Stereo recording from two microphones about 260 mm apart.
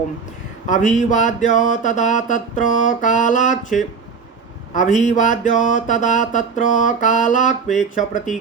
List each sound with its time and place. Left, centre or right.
0.7 s mantra: left
4.7 s a man's voice: left
5.0 s mantra: left